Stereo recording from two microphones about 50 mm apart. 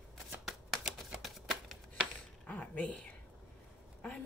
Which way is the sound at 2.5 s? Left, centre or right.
Left.